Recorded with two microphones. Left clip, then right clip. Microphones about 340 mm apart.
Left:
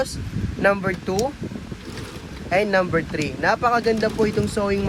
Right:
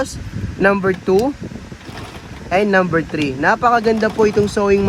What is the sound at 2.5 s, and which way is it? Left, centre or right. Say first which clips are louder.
Speech: right 5 dB; right.